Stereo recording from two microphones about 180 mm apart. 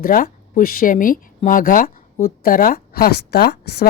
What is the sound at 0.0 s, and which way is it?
A woman's voice, 50° left (ahead or behind).